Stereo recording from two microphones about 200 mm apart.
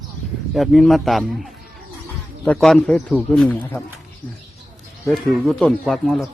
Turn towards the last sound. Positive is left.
turn(degrees=0)  # may be behind; listen again after turning